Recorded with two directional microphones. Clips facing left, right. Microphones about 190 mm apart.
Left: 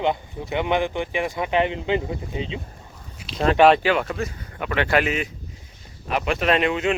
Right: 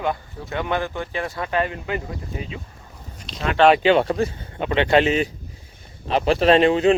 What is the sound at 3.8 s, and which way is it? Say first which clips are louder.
Speech: right 5 dB; 30° right (ahead or behind).